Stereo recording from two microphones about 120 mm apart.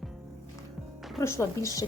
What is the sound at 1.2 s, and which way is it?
Speech, 25° left (ahead or behind).